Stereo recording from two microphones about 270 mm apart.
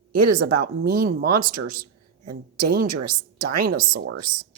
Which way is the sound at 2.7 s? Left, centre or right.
Right.